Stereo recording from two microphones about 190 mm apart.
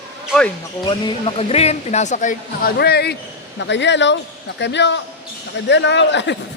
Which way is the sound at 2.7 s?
60° left (ahead or behind).